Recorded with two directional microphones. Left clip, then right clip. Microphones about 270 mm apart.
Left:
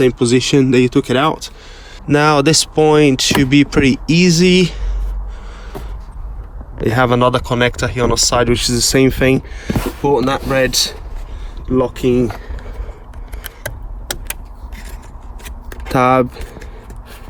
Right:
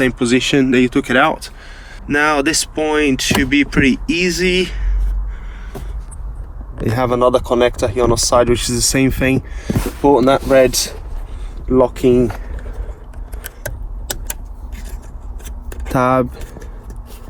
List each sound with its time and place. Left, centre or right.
0.0 s speech: centre
6.9 s speech: left
11.7 s speech: left
15.9 s speech: left